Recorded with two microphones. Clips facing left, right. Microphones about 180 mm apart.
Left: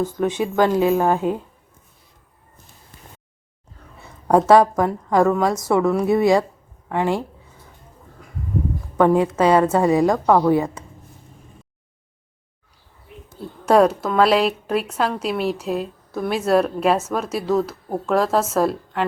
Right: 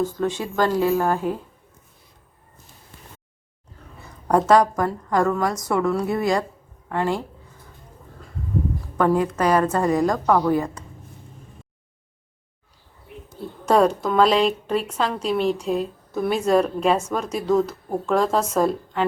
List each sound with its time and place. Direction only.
0.0 s a woman's voice: 15° left (ahead or behind)
4.3 s a woman's voice: 20° left (ahead or behind)
9.0 s a woman's voice: 20° left (ahead or behind)
13.7 s a woman's voice: 5° left (ahead or behind)